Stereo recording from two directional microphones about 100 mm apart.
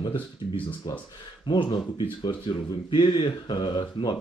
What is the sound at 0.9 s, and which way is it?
Speech, 45° left (ahead or behind).